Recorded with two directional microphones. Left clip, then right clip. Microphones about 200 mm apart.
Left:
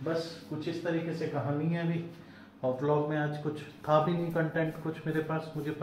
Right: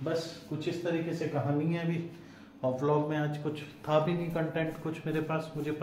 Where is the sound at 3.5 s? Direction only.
10° left (ahead or behind).